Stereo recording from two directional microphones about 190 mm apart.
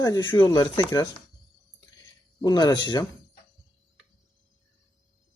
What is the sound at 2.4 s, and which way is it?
Speech, 20° left (ahead or behind).